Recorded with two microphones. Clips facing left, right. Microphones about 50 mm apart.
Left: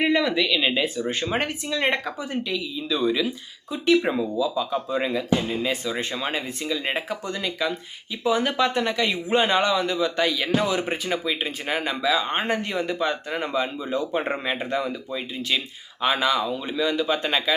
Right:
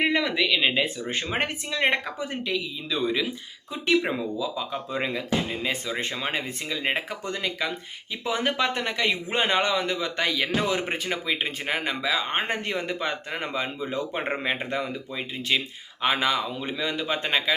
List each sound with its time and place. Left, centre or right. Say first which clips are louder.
0.0 s speech: left 2 dB; right
4.4 s speech: left 5 dB; right
10.9 s speech: left 2 dB; right